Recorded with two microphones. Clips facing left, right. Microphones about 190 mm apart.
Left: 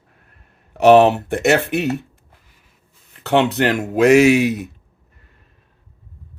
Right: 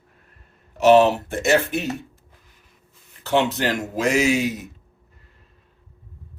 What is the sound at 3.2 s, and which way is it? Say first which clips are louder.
Speech: left 4 dB; 65° left (ahead or behind).